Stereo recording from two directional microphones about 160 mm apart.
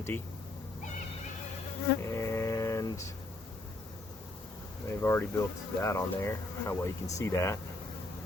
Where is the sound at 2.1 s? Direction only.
20° left (ahead or behind).